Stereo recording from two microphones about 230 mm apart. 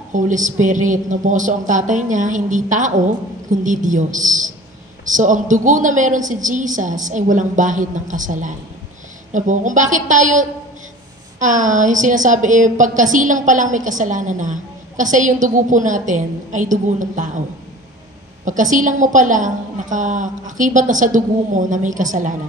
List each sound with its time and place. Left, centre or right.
0.1 s a woman's voice: right
18.4 s a woman's voice: right